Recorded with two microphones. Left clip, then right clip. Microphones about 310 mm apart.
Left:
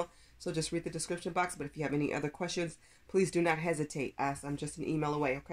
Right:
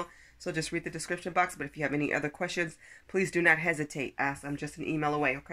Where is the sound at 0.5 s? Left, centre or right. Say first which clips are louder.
Right 2 dB; centre.